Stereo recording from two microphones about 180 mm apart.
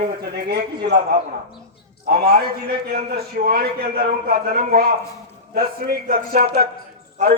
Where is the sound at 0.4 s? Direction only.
65° right (ahead or behind).